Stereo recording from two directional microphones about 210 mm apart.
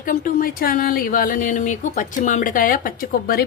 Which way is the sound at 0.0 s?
40° left (ahead or behind).